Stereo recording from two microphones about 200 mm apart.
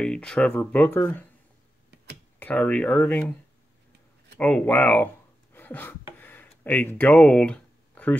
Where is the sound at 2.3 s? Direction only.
5° left (ahead or behind).